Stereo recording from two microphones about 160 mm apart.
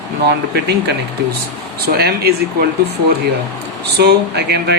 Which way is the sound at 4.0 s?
90° right.